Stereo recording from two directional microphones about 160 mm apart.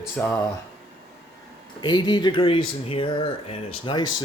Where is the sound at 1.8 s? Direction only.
30° left (ahead or behind).